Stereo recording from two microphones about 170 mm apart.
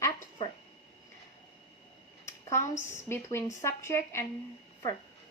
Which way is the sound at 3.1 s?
15° left (ahead or behind).